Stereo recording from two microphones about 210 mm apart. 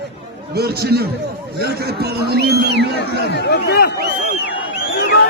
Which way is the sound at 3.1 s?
55° left (ahead or behind).